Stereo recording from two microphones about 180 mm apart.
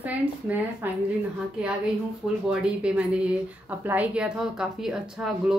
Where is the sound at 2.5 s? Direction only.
5° right (ahead or behind).